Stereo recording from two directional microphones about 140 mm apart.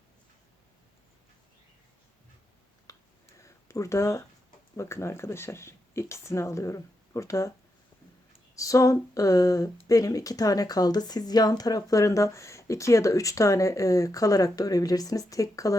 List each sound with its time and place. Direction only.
2.9 s a sound: 25° left (ahead or behind)
4.8 s speech: 20° left (ahead or behind)
8.5 s speech: 25° left (ahead or behind)